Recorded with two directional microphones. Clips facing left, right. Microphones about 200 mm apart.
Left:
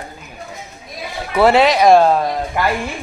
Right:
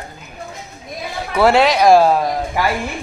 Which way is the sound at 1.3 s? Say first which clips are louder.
Left 1 dB; centre (ahead or behind).